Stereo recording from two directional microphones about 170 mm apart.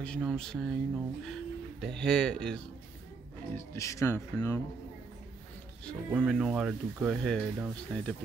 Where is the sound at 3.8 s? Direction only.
20° left (ahead or behind).